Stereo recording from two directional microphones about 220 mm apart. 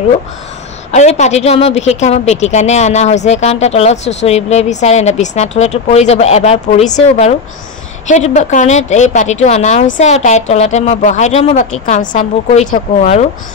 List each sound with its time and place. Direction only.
0.9 s a woman's voice: 30° left (ahead or behind)
8.1 s a woman's voice: 30° left (ahead or behind)